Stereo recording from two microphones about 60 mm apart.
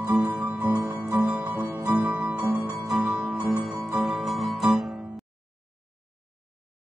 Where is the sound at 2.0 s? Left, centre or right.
Right.